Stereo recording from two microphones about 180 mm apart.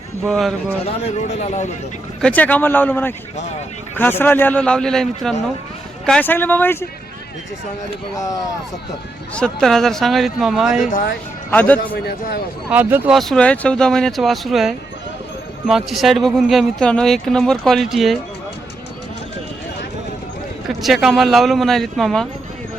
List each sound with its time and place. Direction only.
0.3 s speech: centre (ahead or behind)
1.0 s speech: 40° left (ahead or behind)
2.2 s a man's voice: 10° left (ahead or behind)
8.1 s a man's voice: 20° left (ahead or behind)
9.3 s speech: 5° left (ahead or behind)
11.5 s a man's voice: 10° left (ahead or behind)
12.7 s speech: 10° right (ahead or behind)
13.1 s speech: 5° left (ahead or behind)
20.7 s speech: centre (ahead or behind)